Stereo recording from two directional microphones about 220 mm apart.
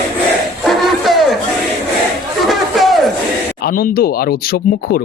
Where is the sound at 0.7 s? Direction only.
Centre (ahead or behind).